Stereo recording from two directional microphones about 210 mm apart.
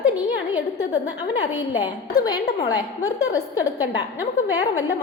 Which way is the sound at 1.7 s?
20° left (ahead or behind).